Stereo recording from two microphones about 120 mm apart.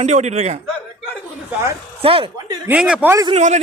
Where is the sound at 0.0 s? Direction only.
70° right (ahead or behind).